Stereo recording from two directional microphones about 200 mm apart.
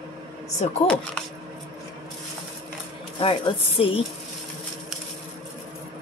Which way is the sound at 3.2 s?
25° left (ahead or behind).